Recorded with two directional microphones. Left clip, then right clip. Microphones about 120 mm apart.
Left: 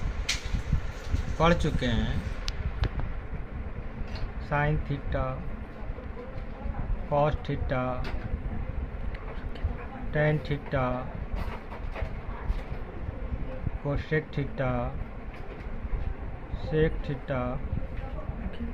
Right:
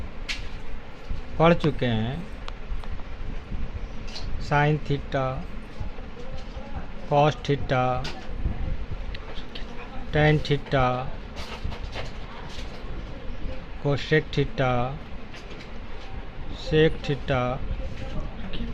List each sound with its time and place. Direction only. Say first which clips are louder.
1.4 s speech: right 5 dB; 55° right (ahead or behind)
4.4 s speech: right 6 dB; 90° right
7.1 s speech: right 5 dB; 85° right
10.1 s speech: right 6 dB; 90° right
13.8 s speech: right 7 dB; 70° right (ahead or behind); by 14.8 s 90° right
16.6 s speech: right 6 dB; 85° right